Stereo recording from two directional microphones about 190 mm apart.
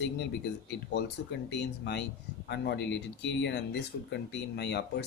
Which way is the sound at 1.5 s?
65° left (ahead or behind).